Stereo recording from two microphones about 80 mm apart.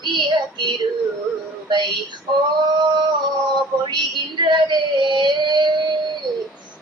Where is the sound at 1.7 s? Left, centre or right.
Right.